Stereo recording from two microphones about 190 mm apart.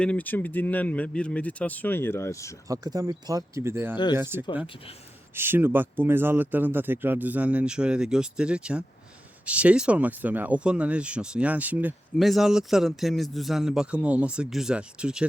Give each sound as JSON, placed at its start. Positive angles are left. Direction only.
{"t": 0.0, "sound": "speech", "side_deg": 5}
{"t": 2.6, "sound": "speech", "side_deg": -20}
{"t": 3.9, "sound": "speech", "side_deg": 20}
{"t": 4.2, "sound": "speech", "side_deg": -10}